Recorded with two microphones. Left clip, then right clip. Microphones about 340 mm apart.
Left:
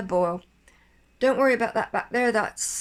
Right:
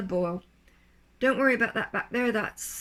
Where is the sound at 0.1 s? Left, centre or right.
Centre.